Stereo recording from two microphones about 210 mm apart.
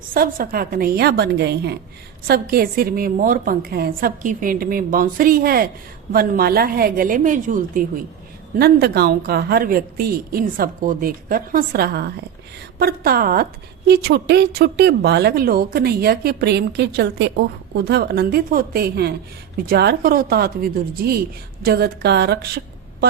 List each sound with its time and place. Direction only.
0.1 s a woman's voice: 45° right (ahead or behind)